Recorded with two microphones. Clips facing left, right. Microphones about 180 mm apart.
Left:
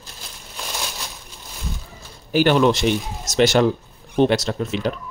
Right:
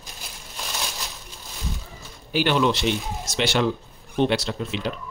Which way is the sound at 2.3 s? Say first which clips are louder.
Left 5 dB; 45° left (ahead or behind).